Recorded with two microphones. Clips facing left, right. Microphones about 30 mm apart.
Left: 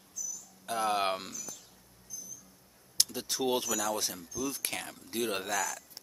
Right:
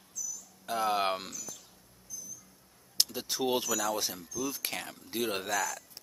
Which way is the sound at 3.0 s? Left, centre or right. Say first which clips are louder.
Right 1 dB; centre.